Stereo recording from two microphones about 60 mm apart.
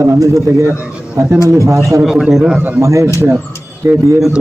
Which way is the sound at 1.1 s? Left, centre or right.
Right.